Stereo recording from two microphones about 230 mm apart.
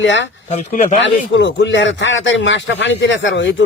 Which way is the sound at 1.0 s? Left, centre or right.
Left.